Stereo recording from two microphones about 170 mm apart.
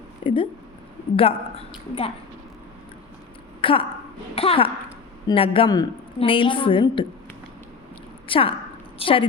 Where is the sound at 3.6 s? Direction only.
30° left (ahead or behind).